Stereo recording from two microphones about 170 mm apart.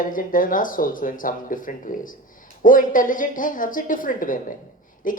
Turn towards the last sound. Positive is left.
turn(degrees=55)  # may be behind; listen again after turning